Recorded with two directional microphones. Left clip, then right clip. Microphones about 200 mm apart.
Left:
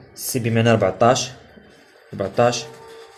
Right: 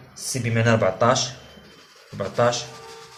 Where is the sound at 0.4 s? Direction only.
50° left (ahead or behind).